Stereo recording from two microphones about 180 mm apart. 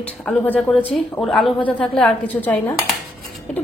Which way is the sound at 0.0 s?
5° left (ahead or behind).